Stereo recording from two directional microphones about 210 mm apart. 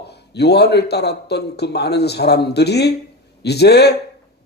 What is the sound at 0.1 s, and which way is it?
A man's voice, 50° left (ahead or behind).